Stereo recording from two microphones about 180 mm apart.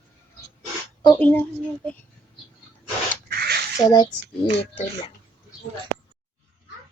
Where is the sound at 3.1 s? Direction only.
60° right (ahead or behind).